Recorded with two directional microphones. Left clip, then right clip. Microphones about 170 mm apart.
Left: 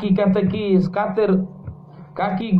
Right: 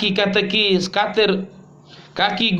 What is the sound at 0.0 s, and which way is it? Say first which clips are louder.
A man's voice: right 2 dB; 30° right (ahead or behind).